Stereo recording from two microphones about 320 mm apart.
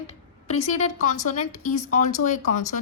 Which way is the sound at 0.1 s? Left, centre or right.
Centre.